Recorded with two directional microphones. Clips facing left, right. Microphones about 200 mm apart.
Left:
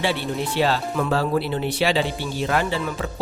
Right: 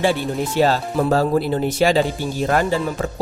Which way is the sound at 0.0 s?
45° right (ahead or behind).